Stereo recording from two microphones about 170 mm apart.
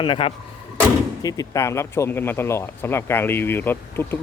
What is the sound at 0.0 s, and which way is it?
Speech, 30° left (ahead or behind).